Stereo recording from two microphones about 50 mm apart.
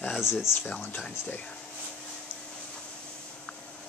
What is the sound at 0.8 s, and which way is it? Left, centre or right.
Speech, left.